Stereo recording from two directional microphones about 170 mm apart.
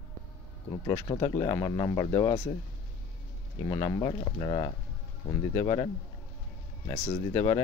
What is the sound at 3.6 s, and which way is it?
Speech, 25° left (ahead or behind).